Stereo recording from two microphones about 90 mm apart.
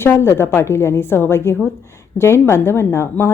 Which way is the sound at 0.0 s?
30° left (ahead or behind).